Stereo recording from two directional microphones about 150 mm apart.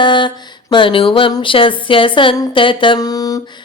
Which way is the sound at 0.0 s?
30° left (ahead or behind).